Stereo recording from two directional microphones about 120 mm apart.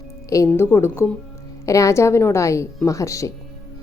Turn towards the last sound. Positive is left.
turn(degrees=25)  # may be behind; listen again after turning